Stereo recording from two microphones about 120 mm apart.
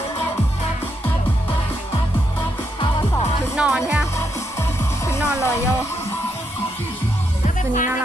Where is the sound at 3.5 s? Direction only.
5° right (ahead or behind).